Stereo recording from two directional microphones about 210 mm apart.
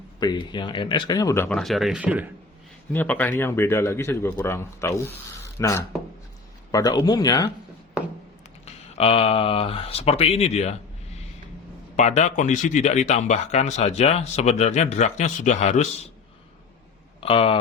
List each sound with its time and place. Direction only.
0.2 s speech: 20° left (ahead or behind); by 2.3 s 5° right (ahead or behind)
2.9 s speech: 10° left (ahead or behind)
8.6 s speech: 30° left (ahead or behind)
11.9 s speech: 35° left (ahead or behind)
17.2 s speech: 25° left (ahead or behind)